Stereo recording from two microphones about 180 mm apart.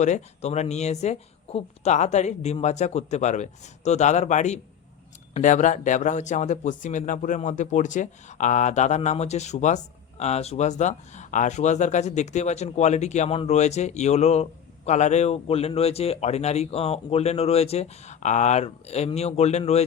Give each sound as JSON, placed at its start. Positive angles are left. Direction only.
{"t": 0.0, "sound": "speech", "side_deg": 40}